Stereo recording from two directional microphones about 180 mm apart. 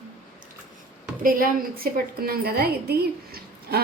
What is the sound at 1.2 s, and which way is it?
A woman's voice, 50° right (ahead or behind).